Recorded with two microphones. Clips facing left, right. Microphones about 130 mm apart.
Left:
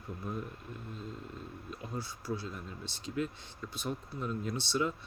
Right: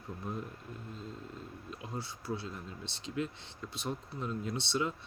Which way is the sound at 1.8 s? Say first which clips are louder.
Left 1 dB; 30° right (ahead or behind).